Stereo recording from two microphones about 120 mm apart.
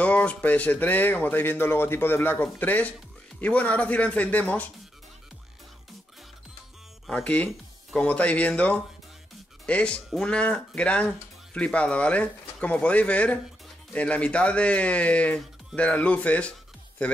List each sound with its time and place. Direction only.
0.0 s speech: 10° left (ahead or behind)
7.1 s speech: 10° left (ahead or behind)